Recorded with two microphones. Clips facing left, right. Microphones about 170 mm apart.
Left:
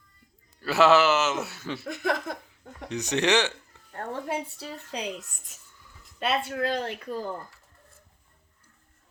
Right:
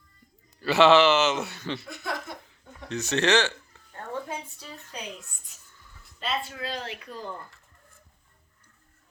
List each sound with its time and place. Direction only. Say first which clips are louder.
0.6 s a man's voice: right 2 dB; centre (ahead or behind)
1.8 s speech: left 6 dB; 50° left (ahead or behind)
2.9 s speech: even; 15° left (ahead or behind)
4.3 s speech: left 6 dB; 65° left (ahead or behind)
6.1 s speech: left 5 dB; 60° left (ahead or behind); by 7.4 s 40° left (ahead or behind)